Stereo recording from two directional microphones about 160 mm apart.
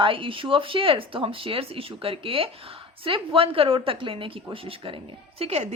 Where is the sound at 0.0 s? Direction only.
35° right (ahead or behind).